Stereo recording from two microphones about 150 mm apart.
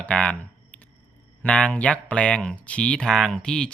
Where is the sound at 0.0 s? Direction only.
5° left (ahead or behind).